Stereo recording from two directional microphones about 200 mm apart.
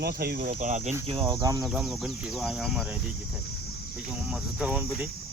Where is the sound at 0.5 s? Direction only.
35° right (ahead or behind).